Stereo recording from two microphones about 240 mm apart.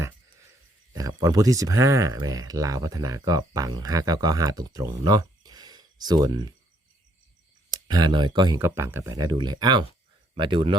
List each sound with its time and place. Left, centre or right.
0.9 s speech: centre
7.7 s speech: centre